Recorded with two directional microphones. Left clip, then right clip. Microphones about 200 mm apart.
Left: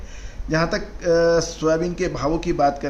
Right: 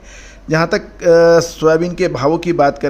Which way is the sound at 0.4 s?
40° right (ahead or behind).